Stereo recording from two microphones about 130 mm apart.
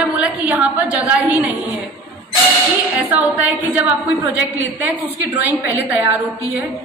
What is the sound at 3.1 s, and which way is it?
A woman's voice, 10° right (ahead or behind).